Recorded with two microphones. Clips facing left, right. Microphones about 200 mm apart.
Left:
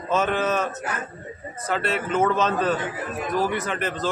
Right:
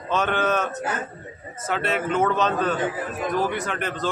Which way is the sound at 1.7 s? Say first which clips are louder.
Right 1 dB; centre (ahead or behind).